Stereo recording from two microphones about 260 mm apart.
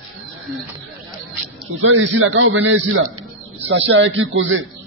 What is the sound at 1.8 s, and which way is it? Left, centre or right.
A man's voice, right.